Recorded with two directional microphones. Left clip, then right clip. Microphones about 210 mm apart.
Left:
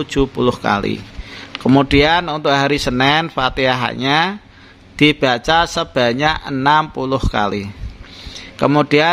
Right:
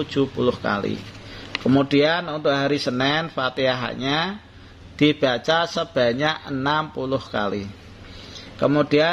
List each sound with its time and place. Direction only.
0.0 s speech: 30° left (ahead or behind)